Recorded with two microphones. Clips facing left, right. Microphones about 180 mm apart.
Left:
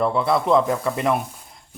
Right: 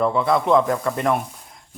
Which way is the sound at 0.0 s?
Centre (ahead or behind).